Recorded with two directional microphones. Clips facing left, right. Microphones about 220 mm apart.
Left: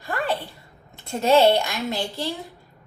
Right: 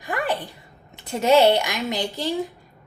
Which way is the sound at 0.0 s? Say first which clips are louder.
Right 1 dB; 15° right (ahead or behind).